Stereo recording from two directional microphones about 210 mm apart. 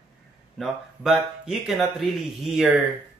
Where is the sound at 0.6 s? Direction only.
Centre (ahead or behind).